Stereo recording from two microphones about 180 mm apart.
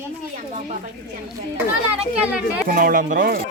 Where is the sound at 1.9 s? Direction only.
5° right (ahead or behind).